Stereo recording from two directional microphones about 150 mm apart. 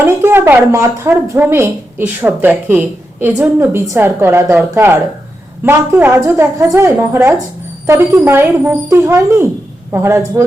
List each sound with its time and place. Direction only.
0.0 s speech: 15° right (ahead or behind)